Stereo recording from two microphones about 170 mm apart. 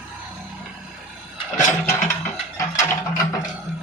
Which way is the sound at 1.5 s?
15° left (ahead or behind).